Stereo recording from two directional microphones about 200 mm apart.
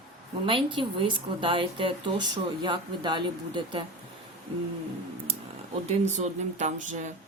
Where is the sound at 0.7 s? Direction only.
25° right (ahead or behind).